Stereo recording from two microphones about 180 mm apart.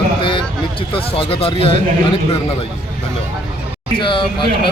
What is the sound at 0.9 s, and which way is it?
Speech, 30° left (ahead or behind).